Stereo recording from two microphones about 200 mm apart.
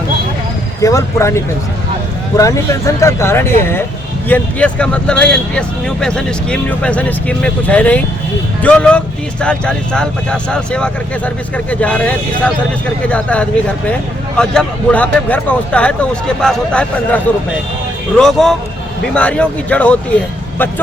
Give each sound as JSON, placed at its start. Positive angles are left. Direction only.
{"t": 0.8, "sound": "speech", "side_deg": 15}
{"t": 18.2, "sound": "speech", "side_deg": 0}